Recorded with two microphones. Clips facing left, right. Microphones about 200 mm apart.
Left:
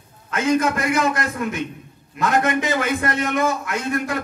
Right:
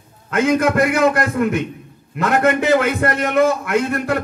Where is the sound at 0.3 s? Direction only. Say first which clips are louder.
Right 3 dB; 60° right (ahead or behind).